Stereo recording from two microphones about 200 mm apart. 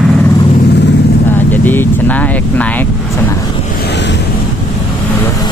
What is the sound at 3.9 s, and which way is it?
Waves, 60° left (ahead or behind).